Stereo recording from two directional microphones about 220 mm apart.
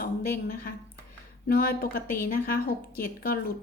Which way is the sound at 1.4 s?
45° left (ahead or behind).